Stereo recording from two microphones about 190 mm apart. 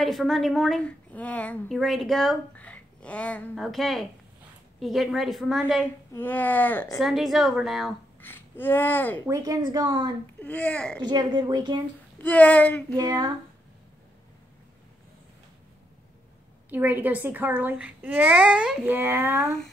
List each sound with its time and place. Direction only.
0.0 s a woman's voice: centre (ahead or behind)
6.1 s speech: 10° left (ahead or behind)
7.0 s a woman's voice: centre (ahead or behind)
8.2 s speech: 10° left (ahead or behind)
9.2 s speech: 15° right (ahead or behind)
10.4 s speech: 10° left (ahead or behind)
11.1 s speech: 20° right (ahead or behind)
12.2 s speech: 10° left (ahead or behind)
12.9 s speech: 20° right (ahead or behind)
16.7 s a child's voice: 10° right (ahead or behind)